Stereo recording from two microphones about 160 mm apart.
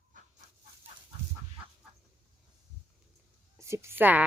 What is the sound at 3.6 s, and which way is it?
Speech, 15° right (ahead or behind).